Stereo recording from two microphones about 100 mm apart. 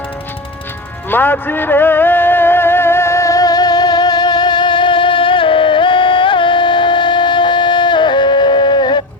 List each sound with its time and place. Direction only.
1.1 s music: 20° left (ahead or behind); by 9.0 s 50° left (ahead or behind)